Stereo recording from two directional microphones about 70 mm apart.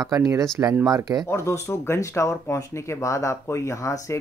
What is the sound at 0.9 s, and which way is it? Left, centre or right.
Speech, right.